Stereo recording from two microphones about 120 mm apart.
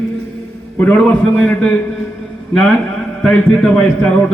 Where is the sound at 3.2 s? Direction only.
5° left (ahead or behind).